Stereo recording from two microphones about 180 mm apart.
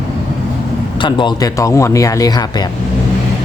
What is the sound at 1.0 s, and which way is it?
Speech, 25° left (ahead or behind).